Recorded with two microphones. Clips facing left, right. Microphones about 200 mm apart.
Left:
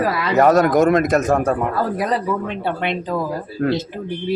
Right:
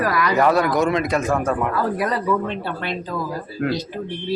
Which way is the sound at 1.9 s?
20° left (ahead or behind).